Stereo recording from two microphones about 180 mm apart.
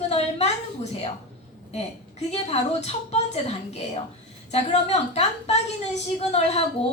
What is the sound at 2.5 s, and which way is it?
Speech, 35° left (ahead or behind).